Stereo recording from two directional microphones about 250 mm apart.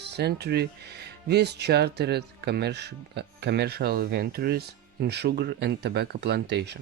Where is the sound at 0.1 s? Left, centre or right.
Right.